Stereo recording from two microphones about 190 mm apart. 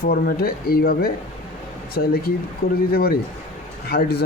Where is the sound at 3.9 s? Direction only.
55° left (ahead or behind).